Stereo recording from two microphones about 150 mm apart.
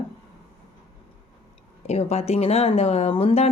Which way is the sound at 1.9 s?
45° left (ahead or behind).